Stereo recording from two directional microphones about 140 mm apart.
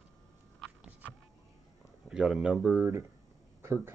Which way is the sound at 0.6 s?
10° right (ahead or behind).